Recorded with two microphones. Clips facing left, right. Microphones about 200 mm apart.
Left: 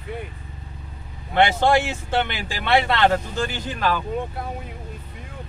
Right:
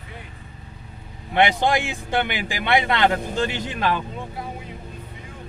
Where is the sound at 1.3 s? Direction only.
15° right (ahead or behind).